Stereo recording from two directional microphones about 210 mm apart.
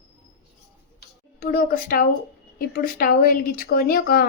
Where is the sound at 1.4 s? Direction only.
45° left (ahead or behind).